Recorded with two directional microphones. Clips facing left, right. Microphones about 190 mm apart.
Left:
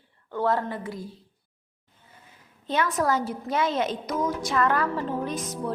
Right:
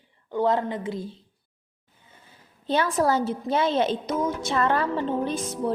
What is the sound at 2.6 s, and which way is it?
A woman's voice, 30° right (ahead or behind).